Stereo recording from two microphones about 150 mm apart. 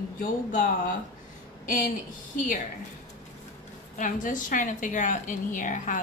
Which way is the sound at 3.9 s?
60° left (ahead or behind).